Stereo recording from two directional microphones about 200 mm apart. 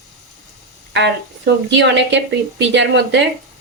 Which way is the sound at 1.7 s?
60° right (ahead or behind).